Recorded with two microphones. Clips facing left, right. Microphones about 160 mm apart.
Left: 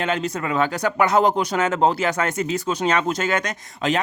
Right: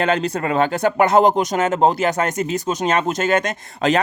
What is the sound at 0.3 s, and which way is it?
Speech, 60° right (ahead or behind).